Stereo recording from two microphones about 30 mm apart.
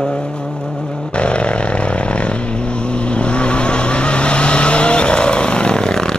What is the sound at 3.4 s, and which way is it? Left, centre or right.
Vehicle, left.